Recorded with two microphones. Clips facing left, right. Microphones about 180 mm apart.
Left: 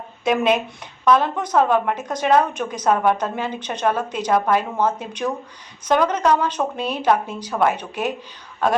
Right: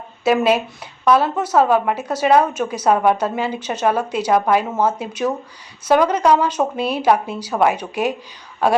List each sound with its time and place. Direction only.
0.3 s a woman's voice: 5° right (ahead or behind)